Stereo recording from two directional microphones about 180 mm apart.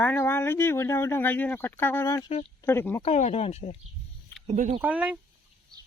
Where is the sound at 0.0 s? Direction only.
10° left (ahead or behind).